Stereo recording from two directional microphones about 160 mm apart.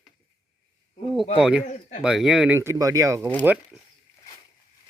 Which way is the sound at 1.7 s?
45° left (ahead or behind).